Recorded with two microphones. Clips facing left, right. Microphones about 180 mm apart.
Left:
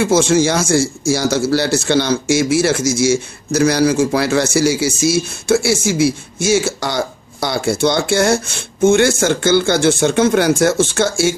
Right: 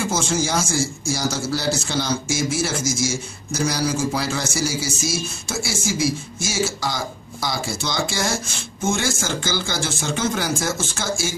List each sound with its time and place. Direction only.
0.0 s speech: 70° left (ahead or behind)